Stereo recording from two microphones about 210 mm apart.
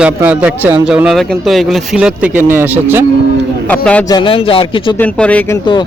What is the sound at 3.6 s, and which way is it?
Speech, 5° left (ahead or behind).